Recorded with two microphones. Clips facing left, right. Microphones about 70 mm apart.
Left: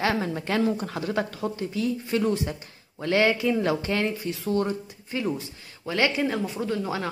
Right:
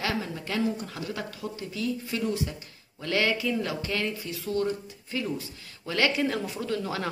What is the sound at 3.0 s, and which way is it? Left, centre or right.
A woman's voice, left.